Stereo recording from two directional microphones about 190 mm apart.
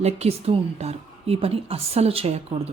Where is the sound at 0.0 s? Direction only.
35° right (ahead or behind).